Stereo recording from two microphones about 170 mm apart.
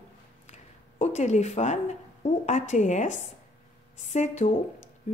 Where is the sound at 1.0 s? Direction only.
40° left (ahead or behind).